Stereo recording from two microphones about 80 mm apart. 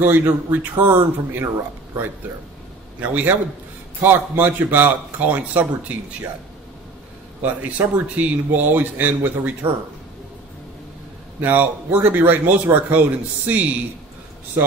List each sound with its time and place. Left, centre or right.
0.0 s speech: right
3.0 s speech: centre
7.4 s speech: centre
11.4 s speech: right